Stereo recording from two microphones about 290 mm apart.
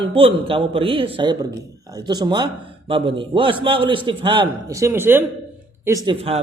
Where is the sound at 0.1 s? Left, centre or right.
Centre.